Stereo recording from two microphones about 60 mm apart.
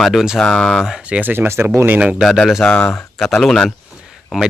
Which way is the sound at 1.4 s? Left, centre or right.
Right.